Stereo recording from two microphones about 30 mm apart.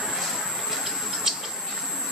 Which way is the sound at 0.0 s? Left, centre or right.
Centre.